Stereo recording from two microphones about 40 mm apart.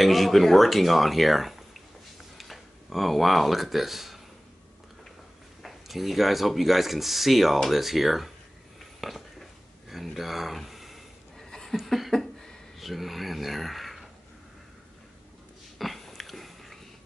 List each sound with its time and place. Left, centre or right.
0.0 s speech: centre
2.3 s a sound: centre
5.6 s speech: centre
9.8 s a sound: centre
12.7 s speech: centre
15.8 s dog: centre